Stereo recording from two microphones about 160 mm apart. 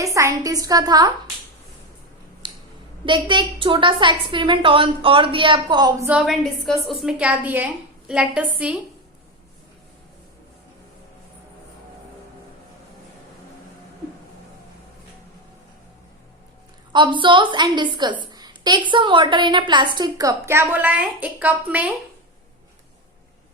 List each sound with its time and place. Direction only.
0.0 s a woman's voice: 20° right (ahead or behind)
2.4 s a sound: 30° right (ahead or behind)
3.1 s a woman's voice: 30° right (ahead or behind)
6.1 s a woman's voice: 5° right (ahead or behind)
16.9 s a woman's voice: 30° right (ahead or behind); by 21.9 s 10° right (ahead or behind)